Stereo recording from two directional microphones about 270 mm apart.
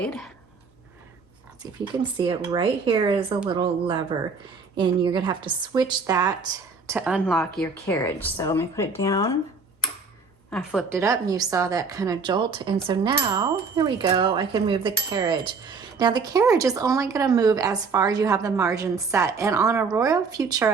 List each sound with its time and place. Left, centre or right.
0.0 s speech: centre
2.1 s a woman's voice: centre
10.5 s a woman's voice: centre